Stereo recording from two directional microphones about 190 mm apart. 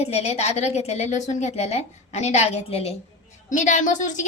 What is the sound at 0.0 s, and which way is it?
A woman's voice, 35° left (ahead or behind).